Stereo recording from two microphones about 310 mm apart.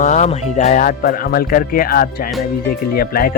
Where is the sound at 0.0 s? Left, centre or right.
Left.